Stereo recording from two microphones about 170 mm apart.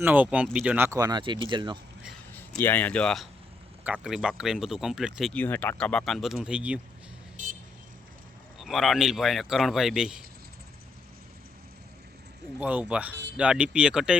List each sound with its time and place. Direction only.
0.0 s speech: 10° right (ahead or behind); by 1.8 s 30° right (ahead or behind)
2.6 s a man's voice: 10° left (ahead or behind)
5.3 s a man's voice: 10° left (ahead or behind); by 6.7 s 5° right (ahead or behind)
8.5 s a man's voice: centre (ahead or behind)
12.5 s a man's voice: 10° right (ahead or behind)